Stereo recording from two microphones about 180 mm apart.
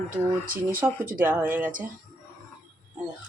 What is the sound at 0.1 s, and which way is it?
Speech, 50° right (ahead or behind).